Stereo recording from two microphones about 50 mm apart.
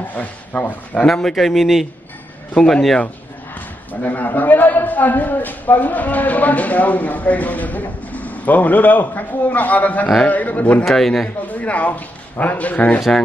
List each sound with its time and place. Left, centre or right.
0.1 s a man's voice: left
1.1 s speech: centre
2.5 s speech: centre
3.9 s a man's voice: left
10.9 s speech: centre
11.4 s a man's voice: left